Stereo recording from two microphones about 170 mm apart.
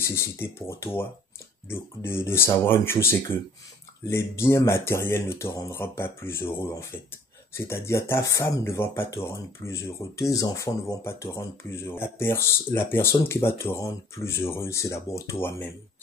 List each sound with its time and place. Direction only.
0.0 s speech: 15° left (ahead or behind)